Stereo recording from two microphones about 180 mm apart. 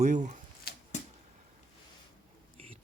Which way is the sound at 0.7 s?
60° left (ahead or behind).